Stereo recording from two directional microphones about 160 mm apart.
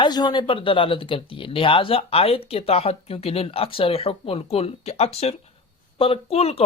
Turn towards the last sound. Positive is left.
turn(degrees=40)  # may be behind; listen again after turning